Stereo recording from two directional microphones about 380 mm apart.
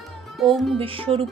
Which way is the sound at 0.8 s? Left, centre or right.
Centre.